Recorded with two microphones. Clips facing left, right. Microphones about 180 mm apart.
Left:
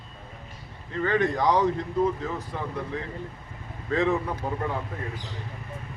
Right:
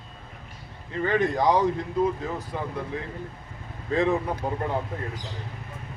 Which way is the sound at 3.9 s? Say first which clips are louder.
Right 1 dB; 15° right (ahead or behind).